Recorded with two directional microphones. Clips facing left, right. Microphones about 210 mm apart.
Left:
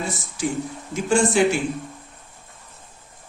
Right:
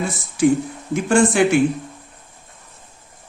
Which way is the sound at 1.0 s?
60° right (ahead or behind).